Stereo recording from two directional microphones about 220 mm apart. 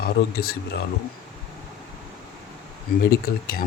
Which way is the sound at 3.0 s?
45° left (ahead or behind).